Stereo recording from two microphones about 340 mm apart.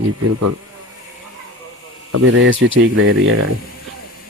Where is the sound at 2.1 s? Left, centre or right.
Right.